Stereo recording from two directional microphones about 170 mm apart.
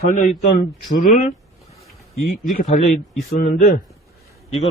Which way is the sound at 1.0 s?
45° left (ahead or behind).